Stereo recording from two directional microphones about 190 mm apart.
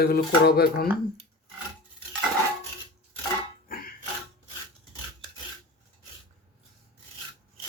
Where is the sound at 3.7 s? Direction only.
50° left (ahead or behind).